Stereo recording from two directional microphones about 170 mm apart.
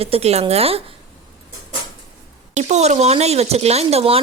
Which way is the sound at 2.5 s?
40° right (ahead or behind).